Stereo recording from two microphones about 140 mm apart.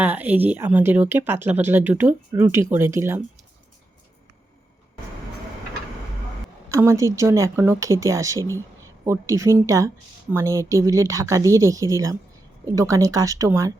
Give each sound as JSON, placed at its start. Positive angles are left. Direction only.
{"t": 0.0, "sound": "speech", "side_deg": -10}
{"t": 6.7, "sound": "speech", "side_deg": -20}
{"t": 8.4, "sound": "speech", "side_deg": 20}
{"t": 9.0, "sound": "speech", "side_deg": -20}